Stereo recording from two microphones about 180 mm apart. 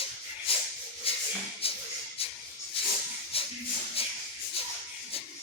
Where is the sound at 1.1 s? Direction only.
30° left (ahead or behind).